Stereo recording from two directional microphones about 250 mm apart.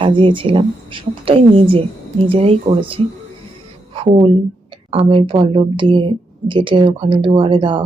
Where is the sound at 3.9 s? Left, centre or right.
Right.